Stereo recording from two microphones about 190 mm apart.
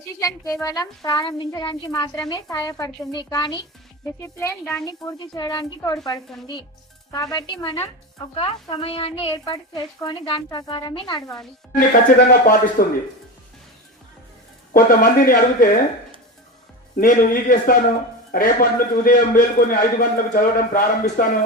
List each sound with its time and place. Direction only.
0.2 s a woman's voice: 20° left (ahead or behind)
4.9 s a woman's voice: 20° left (ahead or behind)
11.8 s a man's voice: 45° left (ahead or behind)
14.7 s a man's voice: 50° left (ahead or behind)
17.0 s a man's voice: 45° left (ahead or behind)